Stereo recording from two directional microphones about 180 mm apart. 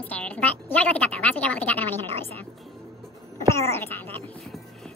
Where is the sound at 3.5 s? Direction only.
15° left (ahead or behind).